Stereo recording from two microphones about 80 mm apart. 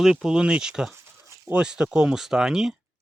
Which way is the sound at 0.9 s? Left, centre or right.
Right.